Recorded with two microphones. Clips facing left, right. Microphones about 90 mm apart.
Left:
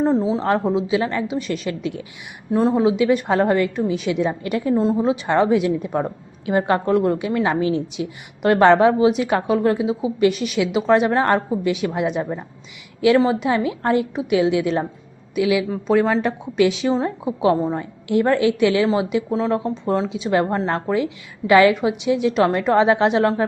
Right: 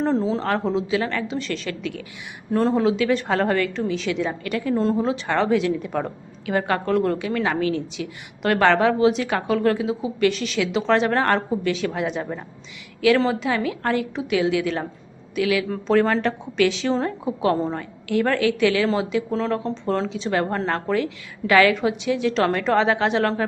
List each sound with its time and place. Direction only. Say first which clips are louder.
0.0 s a woman's voice: left 3 dB; 10° left (ahead or behind)
2.5 s a woman's voice: left 2 dB; 10° left (ahead or behind)
4.7 s a woman's voice: left 3 dB; 10° left (ahead or behind)
15.7 s a woman's voice: left 1 dB; 10° left (ahead or behind)